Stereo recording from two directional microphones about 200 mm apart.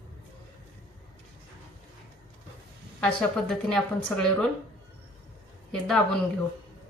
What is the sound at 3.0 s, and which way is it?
A woman's voice, 5° left (ahead or behind).